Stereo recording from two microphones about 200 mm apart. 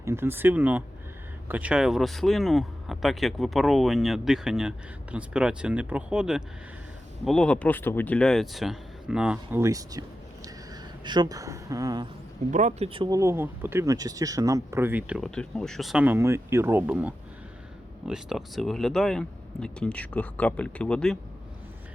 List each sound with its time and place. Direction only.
0.0 s speech: 10° right (ahead or behind)
10.4 s a sound: 20° right (ahead or behind)
12.5 s speech: 35° right (ahead or behind); by 21.2 s 5° left (ahead or behind)